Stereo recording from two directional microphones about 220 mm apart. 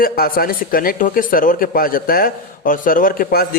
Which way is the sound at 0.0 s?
40° left (ahead or behind).